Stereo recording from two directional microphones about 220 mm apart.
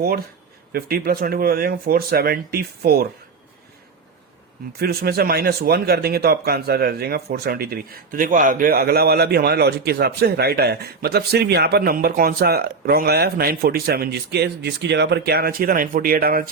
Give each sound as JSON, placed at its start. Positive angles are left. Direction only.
{"t": 0.7, "sound": "speech", "side_deg": -45}
{"t": 4.8, "sound": "speech", "side_deg": -45}